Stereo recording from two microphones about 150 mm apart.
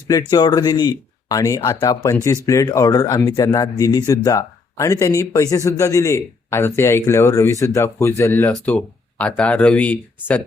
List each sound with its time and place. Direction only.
0.1 s speech: 25° left (ahead or behind); by 10.4 s 10° left (ahead or behind)